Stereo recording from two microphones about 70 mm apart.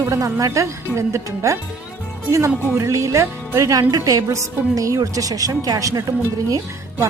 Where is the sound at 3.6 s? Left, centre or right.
Right.